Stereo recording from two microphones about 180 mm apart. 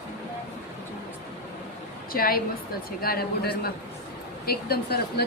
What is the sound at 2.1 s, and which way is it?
A man's voice, 55° left (ahead or behind).